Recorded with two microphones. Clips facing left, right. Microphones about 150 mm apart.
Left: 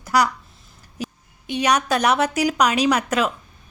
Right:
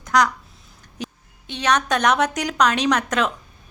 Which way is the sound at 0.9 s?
10° left (ahead or behind).